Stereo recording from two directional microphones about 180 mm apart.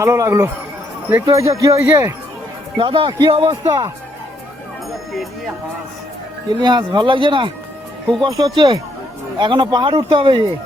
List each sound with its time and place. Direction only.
0.0 s speech: 15° right (ahead or behind)
2.7 s a man's voice: 30° right (ahead or behind)
6.6 s a man's voice: 25° right (ahead or behind)